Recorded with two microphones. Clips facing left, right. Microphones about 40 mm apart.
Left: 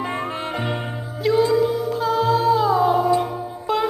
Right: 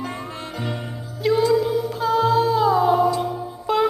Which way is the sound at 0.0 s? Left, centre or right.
Left.